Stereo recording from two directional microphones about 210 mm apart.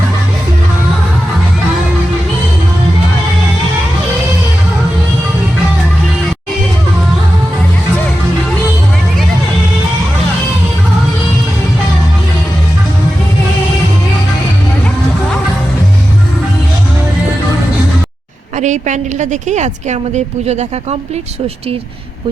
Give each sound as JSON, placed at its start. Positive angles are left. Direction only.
{"t": 18.5, "sound": "a woman's voice", "side_deg": -35}